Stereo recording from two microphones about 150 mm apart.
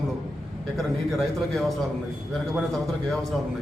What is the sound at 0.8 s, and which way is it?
A man's voice, centre (ahead or behind).